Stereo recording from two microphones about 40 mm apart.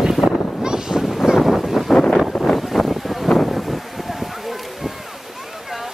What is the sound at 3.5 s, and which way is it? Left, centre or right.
Wind, centre.